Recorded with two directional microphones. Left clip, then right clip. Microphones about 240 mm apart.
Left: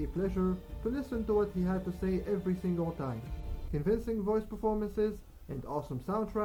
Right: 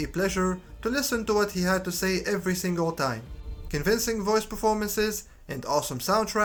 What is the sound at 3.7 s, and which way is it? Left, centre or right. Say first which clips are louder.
Speech: right 7 dB; centre.